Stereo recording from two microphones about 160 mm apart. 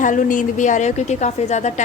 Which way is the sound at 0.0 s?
55° left (ahead or behind).